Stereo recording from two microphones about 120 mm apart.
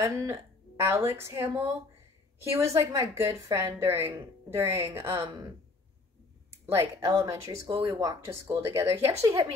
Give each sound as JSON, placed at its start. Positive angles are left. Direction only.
{"t": 0.0, "sound": "a woman's voice", "side_deg": -25}
{"t": 6.6, "sound": "a woman's voice", "side_deg": -20}